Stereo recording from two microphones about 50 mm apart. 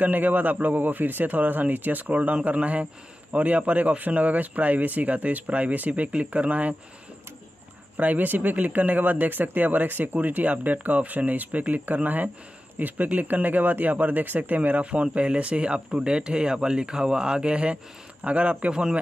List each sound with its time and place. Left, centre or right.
0.0 s a man's voice: right
8.0 s a man's voice: right; by 18.9 s centre